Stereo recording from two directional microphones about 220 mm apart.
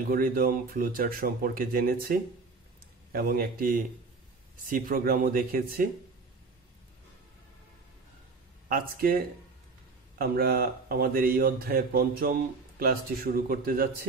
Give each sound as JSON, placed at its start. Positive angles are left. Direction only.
{"t": 0.1, "sound": "speech", "side_deg": -40}
{"t": 8.6, "sound": "speech", "side_deg": -40}